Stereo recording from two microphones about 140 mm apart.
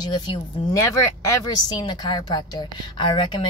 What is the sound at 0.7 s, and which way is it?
Speech, 20° left (ahead or behind).